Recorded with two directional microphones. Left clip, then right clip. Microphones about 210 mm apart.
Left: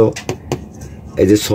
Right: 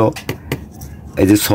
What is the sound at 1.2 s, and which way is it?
Speech, 50° right (ahead or behind).